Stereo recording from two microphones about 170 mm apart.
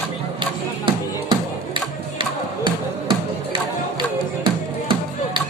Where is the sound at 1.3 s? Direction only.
30° right (ahead or behind).